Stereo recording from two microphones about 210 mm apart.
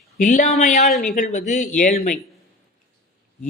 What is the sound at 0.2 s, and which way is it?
A woman's voice, 35° left (ahead or behind).